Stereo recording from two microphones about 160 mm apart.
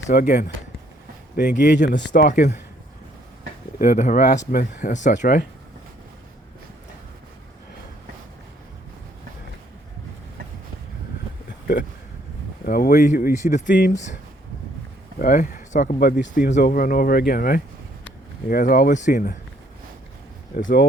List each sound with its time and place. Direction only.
0.1 s speech: 65° left (ahead or behind)
1.5 s speech: 50° left (ahead or behind)
2.0 s speech: 75° left (ahead or behind); by 2.6 s 55° left (ahead or behind)
3.8 s speech: 55° left (ahead or behind)
12.6 s speech: 65° left (ahead or behind); by 13.7 s 50° left (ahead or behind)
15.2 s speech: 60° left (ahead or behind)
16.0 s speech: 75° left (ahead or behind)
16.6 s speech: 60° left (ahead or behind)
20.6 s speech: 55° left (ahead or behind)